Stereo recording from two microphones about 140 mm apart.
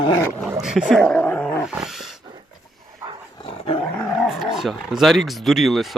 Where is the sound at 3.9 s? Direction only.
Centre (ahead or behind).